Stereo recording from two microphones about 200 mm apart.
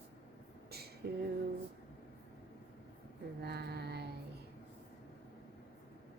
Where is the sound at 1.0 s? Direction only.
50° right (ahead or behind).